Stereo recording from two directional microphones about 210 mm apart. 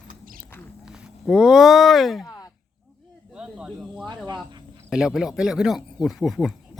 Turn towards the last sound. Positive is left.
turn(degrees=0)  # may be behind; listen again after turning